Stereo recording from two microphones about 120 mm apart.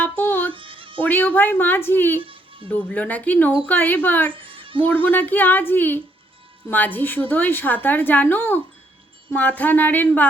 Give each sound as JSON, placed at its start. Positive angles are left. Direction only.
{"t": 0.0, "sound": "music", "side_deg": 15}
{"t": 0.5, "sound": "music", "side_deg": -45}
{"t": 1.0, "sound": "a woman's voice", "side_deg": 15}
{"t": 2.2, "sound": "music", "side_deg": -45}
{"t": 2.6, "sound": "a woman's voice", "side_deg": 10}
{"t": 4.3, "sound": "a sound", "side_deg": -45}
{"t": 4.9, "sound": "a woman's voice", "side_deg": 15}